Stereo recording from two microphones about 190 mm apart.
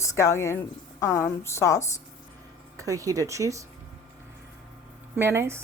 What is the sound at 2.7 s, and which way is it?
Speech, 15° right (ahead or behind).